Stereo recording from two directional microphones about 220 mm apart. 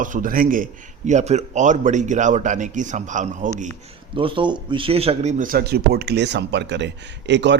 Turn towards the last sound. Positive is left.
turn(degrees=-55)  # may be behind; listen again after turning